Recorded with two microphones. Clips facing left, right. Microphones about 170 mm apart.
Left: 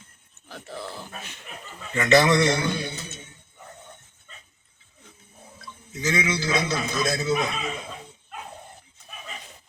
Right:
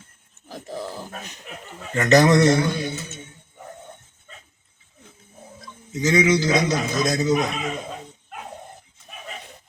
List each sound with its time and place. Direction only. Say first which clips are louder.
0.9 s a man's voice: right 4 dB; 40° right (ahead or behind)
6.1 s a man's voice: right 7 dB; 45° right (ahead or behind)